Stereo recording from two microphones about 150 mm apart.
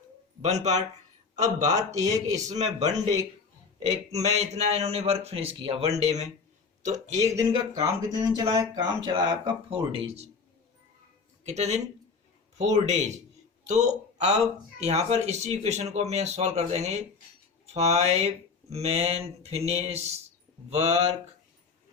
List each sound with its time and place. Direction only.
0.4 s speech: 50° right (ahead or behind)
2.1 s speech: 25° right (ahead or behind)
2.5 s speech: 50° right (ahead or behind)
7.3 s speech: 20° right (ahead or behind)
9.6 s speech: 40° right (ahead or behind)
11.4 s speech: 50° right (ahead or behind)